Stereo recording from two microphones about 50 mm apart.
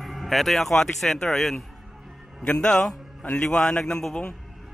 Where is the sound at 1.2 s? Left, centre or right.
Centre.